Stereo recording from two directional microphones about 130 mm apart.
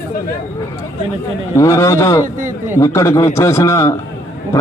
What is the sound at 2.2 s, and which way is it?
Speech, 80° right.